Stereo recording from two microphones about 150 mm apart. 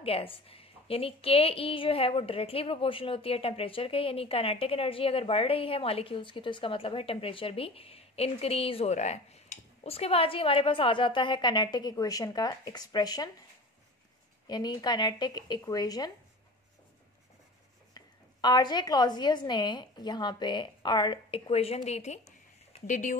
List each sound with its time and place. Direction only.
0.0 s a woman's voice: 40° left (ahead or behind)
14.5 s a woman's voice: 25° left (ahead or behind)
17.9 s a woman's voice: 30° left (ahead or behind); by 23.1 s 55° left (ahead or behind)